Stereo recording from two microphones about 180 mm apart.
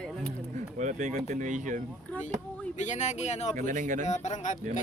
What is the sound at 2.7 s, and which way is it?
Speech, 40° left (ahead or behind).